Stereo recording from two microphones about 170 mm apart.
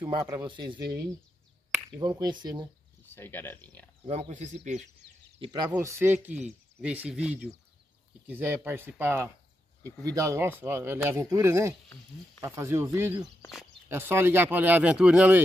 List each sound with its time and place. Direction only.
0.2 s speech: 15° right (ahead or behind)
2.0 s speech: 25° right (ahead or behind)
3.2 s speech: 10° left (ahead or behind)
4.1 s speech: 40° right (ahead or behind)
5.4 s speech: 25° right (ahead or behind); by 15.4 s 5° right (ahead or behind)